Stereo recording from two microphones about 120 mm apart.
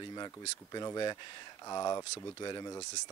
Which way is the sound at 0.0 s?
35° left (ahead or behind).